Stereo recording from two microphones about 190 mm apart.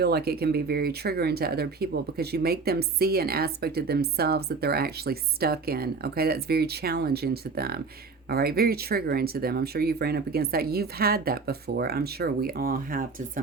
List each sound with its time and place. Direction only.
0.0 s speech: 55° right (ahead or behind)